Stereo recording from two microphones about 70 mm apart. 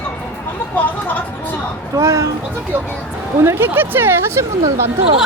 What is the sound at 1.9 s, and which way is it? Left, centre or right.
Speech, right.